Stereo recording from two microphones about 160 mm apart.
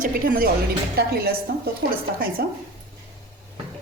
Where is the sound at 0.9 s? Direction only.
70° right (ahead or behind).